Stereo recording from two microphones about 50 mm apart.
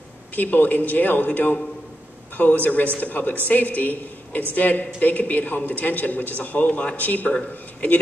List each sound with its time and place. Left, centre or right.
0.4 s speech: left